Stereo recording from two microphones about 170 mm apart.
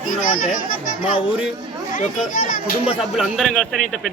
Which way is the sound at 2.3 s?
50° left (ahead or behind).